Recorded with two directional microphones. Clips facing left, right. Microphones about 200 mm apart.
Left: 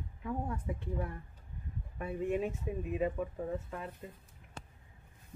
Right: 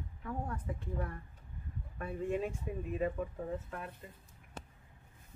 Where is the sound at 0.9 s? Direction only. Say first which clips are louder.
Left 1 dB; 15° left (ahead or behind).